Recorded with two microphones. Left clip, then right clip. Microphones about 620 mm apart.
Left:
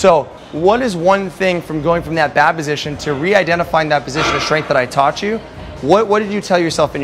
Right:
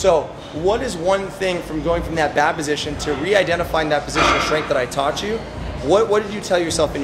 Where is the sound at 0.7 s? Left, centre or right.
Left.